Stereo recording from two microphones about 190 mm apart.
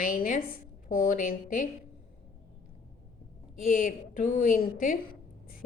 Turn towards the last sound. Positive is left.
turn(degrees=45)  # may be behind; listen again after turning